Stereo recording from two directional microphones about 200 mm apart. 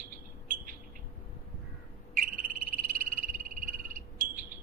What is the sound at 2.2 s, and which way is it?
Frog, 45° right (ahead or behind).